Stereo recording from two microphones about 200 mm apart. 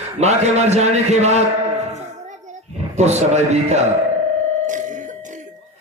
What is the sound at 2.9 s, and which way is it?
Speech, 35° right (ahead or behind).